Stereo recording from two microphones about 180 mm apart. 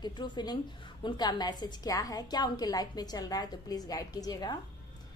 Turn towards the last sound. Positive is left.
turn(degrees=20)  # may be behind; listen again after turning